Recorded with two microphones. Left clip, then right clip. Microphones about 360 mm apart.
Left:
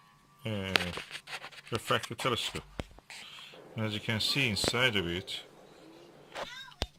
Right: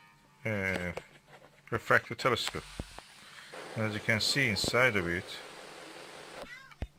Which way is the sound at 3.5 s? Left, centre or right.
Right.